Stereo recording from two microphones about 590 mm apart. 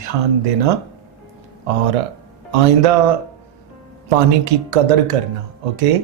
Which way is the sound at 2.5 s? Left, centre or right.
Right.